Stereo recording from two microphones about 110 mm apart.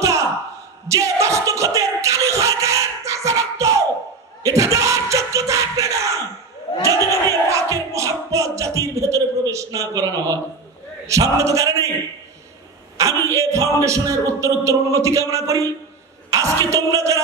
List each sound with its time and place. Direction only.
0.8 s a sound: 30° right (ahead or behind)
4.4 s battle cry: 30° right (ahead or behind)
7.0 s crowd: 25° left (ahead or behind)
7.4 s music: 25° right (ahead or behind)
11.1 s speech: 30° right (ahead or behind)
12.9 s a man's voice: 30° right (ahead or behind)